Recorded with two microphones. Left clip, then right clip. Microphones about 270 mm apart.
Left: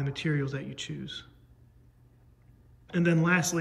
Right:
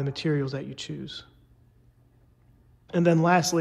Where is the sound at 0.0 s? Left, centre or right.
Centre.